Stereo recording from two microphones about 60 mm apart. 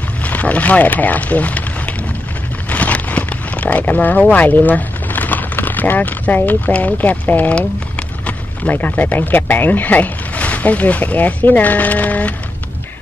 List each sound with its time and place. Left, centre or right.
0.2 s speech: left
2.7 s a sound: left
4.3 s speech: left